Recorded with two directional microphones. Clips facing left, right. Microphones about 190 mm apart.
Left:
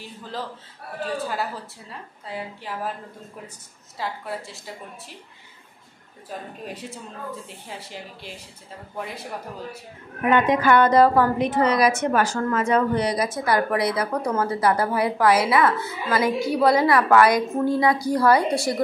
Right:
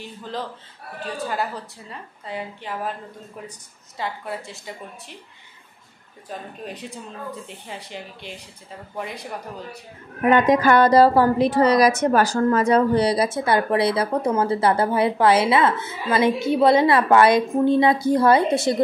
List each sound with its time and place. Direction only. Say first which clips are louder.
0.2 s a woman's voice: right 2 dB; 5° left (ahead or behind)
4.0 s a woman's voice: right 1 dB; centre (ahead or behind)
6.6 s a woman's voice: right 1 dB; 10° left (ahead or behind)
10.3 s a woman's voice: right 2 dB; 40° right (ahead or behind); by 18.8 s 25° right (ahead or behind)